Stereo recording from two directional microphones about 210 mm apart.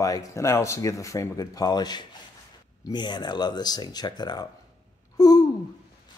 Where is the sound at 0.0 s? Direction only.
15° left (ahead or behind).